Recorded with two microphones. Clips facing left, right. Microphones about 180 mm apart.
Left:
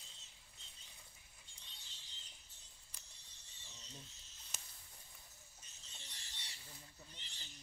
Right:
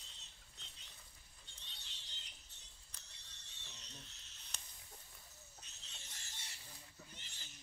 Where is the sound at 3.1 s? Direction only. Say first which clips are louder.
Right 2 dB; 70° right (ahead or behind).